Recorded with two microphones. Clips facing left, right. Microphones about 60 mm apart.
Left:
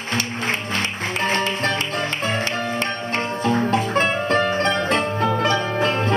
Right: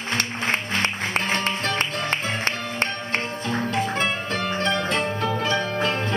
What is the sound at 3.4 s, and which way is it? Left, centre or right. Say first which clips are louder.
Music: left 7 dB; left.